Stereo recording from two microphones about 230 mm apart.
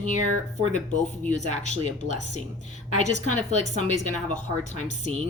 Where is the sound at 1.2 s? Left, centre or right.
Left.